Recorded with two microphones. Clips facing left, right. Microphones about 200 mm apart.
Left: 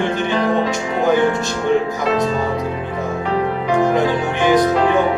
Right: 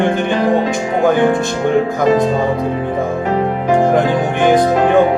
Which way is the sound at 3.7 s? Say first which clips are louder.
Right 3 dB; 50° right (ahead or behind).